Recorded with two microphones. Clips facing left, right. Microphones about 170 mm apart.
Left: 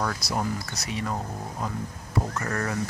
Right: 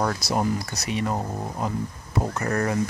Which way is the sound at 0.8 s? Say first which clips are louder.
Right 5 dB; 20° right (ahead or behind).